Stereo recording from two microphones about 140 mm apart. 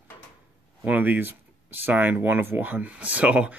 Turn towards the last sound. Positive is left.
turn(degrees=-10)  # may be behind; listen again after turning